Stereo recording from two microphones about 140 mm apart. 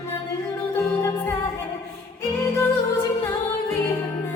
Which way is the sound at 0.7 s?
20° left (ahead or behind).